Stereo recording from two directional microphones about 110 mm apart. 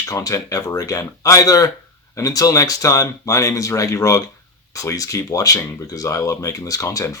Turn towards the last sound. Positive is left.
turn(degrees=30)  # may be behind; listen again after turning